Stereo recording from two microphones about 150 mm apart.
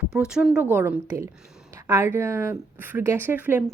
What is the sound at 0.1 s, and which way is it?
Speech, 5° right (ahead or behind).